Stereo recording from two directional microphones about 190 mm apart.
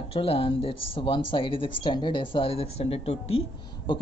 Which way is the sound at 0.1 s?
30° left (ahead or behind).